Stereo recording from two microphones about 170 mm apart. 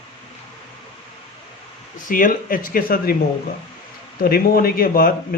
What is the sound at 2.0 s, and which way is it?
A man's voice, 55° left (ahead or behind).